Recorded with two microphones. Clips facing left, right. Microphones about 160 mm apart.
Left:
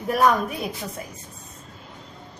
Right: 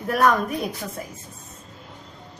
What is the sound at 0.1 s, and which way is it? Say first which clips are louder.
Speech: even; 10° left (ahead or behind).